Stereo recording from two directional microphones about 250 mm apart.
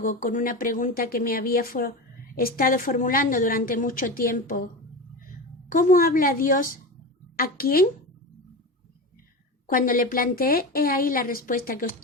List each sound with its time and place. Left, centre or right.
0.0 s a woman's voice: left
5.6 s a woman's voice: left
9.6 s a woman's voice: left